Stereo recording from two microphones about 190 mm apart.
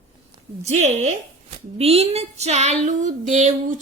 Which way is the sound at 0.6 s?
35° right (ahead or behind).